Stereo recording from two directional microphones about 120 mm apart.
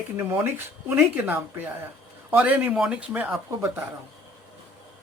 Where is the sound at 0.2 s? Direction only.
25° right (ahead or behind).